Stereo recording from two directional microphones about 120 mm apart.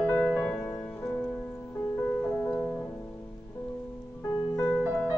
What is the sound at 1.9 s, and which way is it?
Piano, 20° left (ahead or behind).